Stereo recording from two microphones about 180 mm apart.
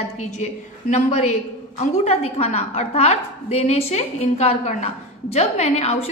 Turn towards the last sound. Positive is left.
turn(degrees=35)  # may be behind; listen again after turning